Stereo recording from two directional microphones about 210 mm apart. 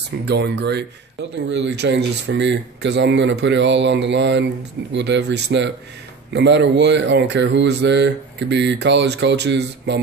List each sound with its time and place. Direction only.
0.2 s speech: 55° right (ahead or behind)